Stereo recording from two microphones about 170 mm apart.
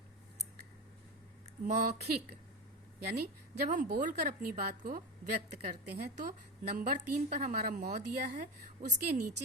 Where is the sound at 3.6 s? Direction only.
50° right (ahead or behind); by 6.1 s 65° right (ahead or behind).